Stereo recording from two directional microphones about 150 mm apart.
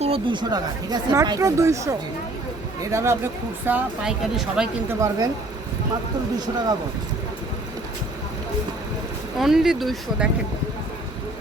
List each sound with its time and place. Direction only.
0.0 s speech: 35° right (ahead or behind); by 3.2 s 20° right (ahead or behind)
3.7 s speech: 5° right (ahead or behind)
4.9 s speech: 20° right (ahead or behind)
9.4 s speech: centre (ahead or behind)